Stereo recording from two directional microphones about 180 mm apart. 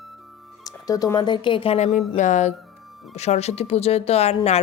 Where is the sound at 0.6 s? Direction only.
20° left (ahead or behind).